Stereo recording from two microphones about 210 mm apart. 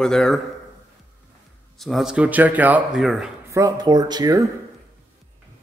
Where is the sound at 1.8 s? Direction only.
Centre (ahead or behind).